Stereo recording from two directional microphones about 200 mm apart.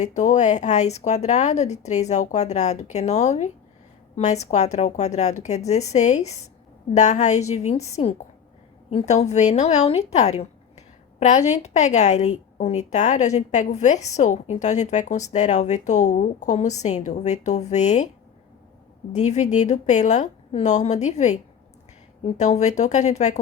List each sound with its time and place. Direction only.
0.2 s a woman's voice: 35° left (ahead or behind)
19.1 s a woman's voice: 35° left (ahead or behind)